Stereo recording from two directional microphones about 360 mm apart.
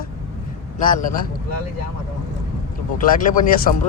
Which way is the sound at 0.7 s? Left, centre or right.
Left.